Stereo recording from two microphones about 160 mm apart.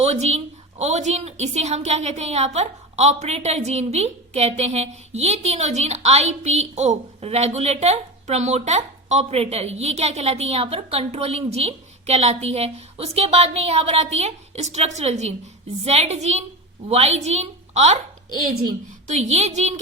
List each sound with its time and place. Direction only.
0.0 s a woman's voice: 45° right (ahead or behind)
19.0 s a woman's voice: 45° right (ahead or behind)